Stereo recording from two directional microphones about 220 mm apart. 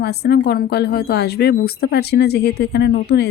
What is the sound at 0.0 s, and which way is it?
Speech, 45° left (ahead or behind).